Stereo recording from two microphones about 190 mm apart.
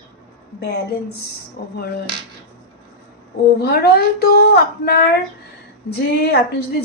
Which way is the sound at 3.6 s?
55° left (ahead or behind).